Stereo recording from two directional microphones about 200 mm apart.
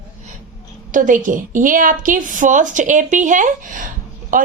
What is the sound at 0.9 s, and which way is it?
Speech, 40° right (ahead or behind).